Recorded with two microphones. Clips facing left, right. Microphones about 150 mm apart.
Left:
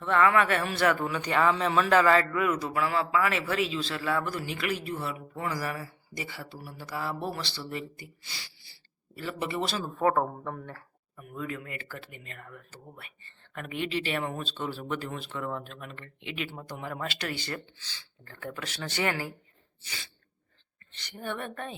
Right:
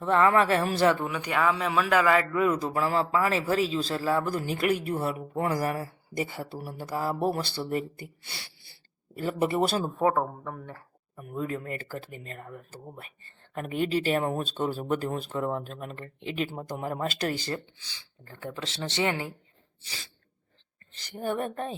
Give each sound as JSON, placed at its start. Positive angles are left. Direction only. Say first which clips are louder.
{"t": 0.0, "sound": "speech", "louder": "right 2 dB", "side_deg": -35}
{"t": 0.9, "sound": "a man's voice", "louder": "left 1 dB", "side_deg": -15}
{"t": 2.3, "sound": "a man's voice", "louder": "right 3 dB", "side_deg": -25}
{"t": 9.8, "sound": "a man's voice", "louder": "right 1 dB", "side_deg": -15}
{"t": 10.2, "sound": "speech", "louder": "even", "side_deg": -5}
{"t": 11.2, "sound": "speech", "louder": "right 4 dB", "side_deg": -40}
{"t": 17.7, "sound": "speech", "louder": "left 1 dB", "side_deg": -15}
{"t": 20.9, "sound": "speech", "louder": "right 6 dB", "side_deg": -35}